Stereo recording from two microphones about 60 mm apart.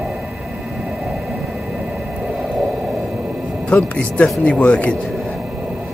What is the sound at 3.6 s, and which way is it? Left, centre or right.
A man's voice, left.